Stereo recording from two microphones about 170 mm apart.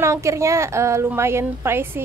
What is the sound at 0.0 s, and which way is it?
A woman's voice, 15° right (ahead or behind).